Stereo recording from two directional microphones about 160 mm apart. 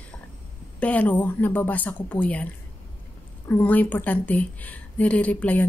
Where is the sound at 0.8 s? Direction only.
10° left (ahead or behind).